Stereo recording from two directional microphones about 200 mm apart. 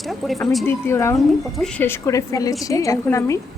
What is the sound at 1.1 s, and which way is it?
A woman's voice, centre (ahead or behind).